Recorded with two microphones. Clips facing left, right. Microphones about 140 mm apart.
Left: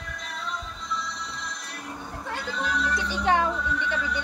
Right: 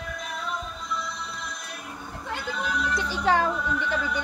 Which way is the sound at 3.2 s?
35° right (ahead or behind).